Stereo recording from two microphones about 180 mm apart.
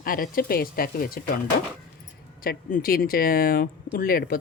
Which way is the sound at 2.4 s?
55° left (ahead or behind).